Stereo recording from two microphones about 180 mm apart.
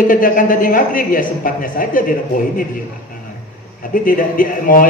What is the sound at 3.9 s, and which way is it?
Speech, 50° left (ahead or behind).